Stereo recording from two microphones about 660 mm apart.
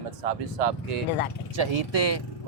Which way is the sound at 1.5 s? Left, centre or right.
Right.